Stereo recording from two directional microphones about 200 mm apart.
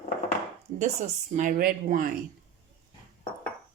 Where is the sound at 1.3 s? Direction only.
40° right (ahead or behind).